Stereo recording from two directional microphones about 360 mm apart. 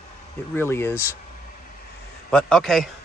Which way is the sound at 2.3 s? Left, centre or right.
Centre.